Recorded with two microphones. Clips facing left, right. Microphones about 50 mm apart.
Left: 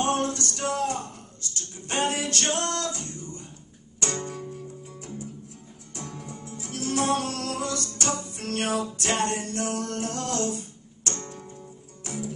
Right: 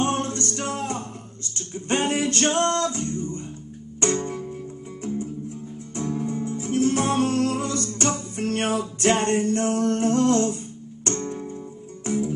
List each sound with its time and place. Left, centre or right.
0.0 s music: right
5.9 s music: right